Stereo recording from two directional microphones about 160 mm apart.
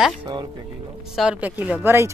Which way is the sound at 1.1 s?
5° right (ahead or behind).